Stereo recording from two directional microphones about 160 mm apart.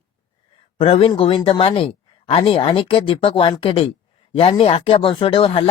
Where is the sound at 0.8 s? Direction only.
35° left (ahead or behind).